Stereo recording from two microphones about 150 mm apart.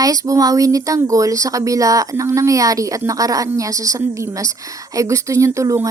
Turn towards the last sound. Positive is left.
turn(degrees=-20)  # may be behind; listen again after turning